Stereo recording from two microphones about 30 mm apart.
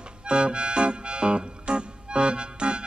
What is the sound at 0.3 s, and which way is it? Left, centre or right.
Music, right.